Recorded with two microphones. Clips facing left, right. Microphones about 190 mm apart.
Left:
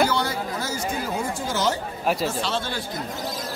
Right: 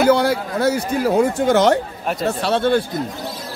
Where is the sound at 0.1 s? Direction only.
60° right (ahead or behind).